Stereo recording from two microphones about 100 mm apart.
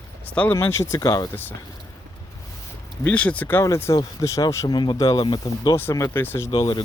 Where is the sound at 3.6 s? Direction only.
30° left (ahead or behind).